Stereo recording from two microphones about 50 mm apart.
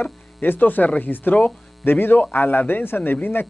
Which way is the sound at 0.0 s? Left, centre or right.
Left.